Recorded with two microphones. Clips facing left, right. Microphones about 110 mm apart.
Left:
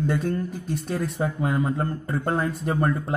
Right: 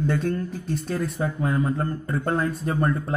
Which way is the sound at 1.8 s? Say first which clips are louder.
Even; 30° left (ahead or behind).